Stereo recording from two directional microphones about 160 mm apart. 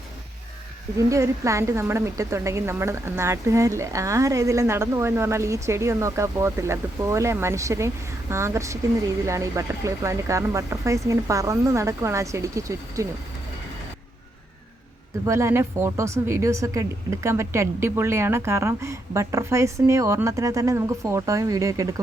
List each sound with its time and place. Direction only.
0.9 s speech: 20° right (ahead or behind)
15.3 s speech: 15° right (ahead or behind)